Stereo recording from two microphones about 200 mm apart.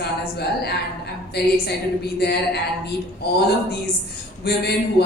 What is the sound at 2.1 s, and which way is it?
A man's voice, 55° left (ahead or behind).